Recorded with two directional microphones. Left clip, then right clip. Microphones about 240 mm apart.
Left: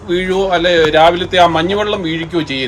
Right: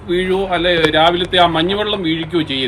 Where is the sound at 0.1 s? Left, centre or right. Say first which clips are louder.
Left 3 dB; left.